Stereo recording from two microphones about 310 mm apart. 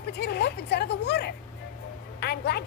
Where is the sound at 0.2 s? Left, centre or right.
Left.